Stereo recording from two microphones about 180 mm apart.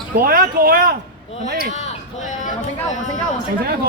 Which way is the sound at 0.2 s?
55° right (ahead or behind).